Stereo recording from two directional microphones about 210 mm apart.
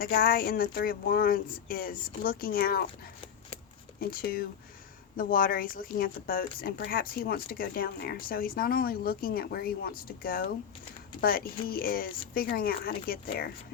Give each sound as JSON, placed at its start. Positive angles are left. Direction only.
{"t": 0.0, "sound": "speech", "side_deg": 45}
{"t": 4.1, "sound": "speech", "side_deg": 45}